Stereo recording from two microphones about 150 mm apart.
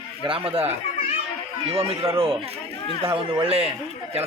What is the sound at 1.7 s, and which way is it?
A man's voice, 40° right (ahead or behind).